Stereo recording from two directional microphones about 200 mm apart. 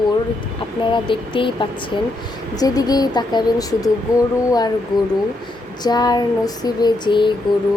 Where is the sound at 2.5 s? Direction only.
20° left (ahead or behind).